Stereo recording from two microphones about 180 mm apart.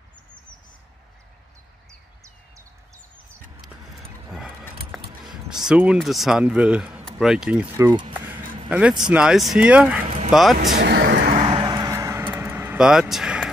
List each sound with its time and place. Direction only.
4.3 s a sound: 5° right (ahead or behind)
5.7 s speech: 5° right (ahead or behind)
7.7 s speech: 20° right (ahead or behind)
8.6 s speech: 5° right (ahead or behind)
10.0 s vehicle: 40° right (ahead or behind)
10.3 s speech: centre (ahead or behind)
10.8 s a sound: 65° right (ahead or behind)
11.4 s vehicle: 25° right (ahead or behind); by 13.0 s 5° right (ahead or behind)
13.1 s speech: 5° right (ahead or behind)